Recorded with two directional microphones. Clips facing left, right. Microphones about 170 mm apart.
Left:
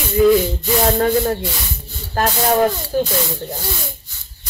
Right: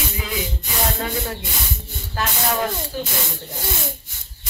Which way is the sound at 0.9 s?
50° left (ahead or behind).